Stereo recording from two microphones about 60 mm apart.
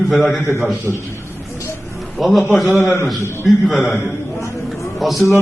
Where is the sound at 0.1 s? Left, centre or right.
Centre.